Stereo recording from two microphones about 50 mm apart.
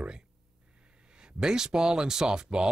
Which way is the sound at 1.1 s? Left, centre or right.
Centre.